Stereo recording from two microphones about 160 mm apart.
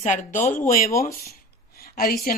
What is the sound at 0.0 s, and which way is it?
Speech, 50° left (ahead or behind).